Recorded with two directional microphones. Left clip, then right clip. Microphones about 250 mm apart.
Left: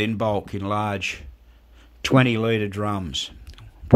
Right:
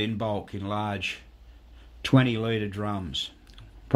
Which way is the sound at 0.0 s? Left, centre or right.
Left.